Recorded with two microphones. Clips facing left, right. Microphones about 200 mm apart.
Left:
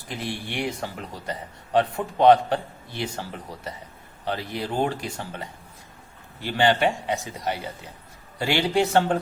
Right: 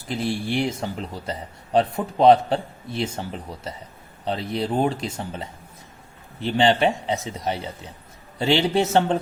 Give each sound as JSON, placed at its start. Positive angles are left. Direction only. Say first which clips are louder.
{"t": 0.1, "sound": "speech", "louder": "right 7 dB", "side_deg": -25}